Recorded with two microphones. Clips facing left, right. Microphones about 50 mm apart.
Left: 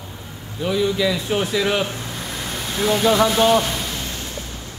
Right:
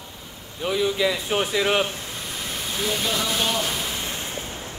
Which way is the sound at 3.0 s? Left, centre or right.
Left.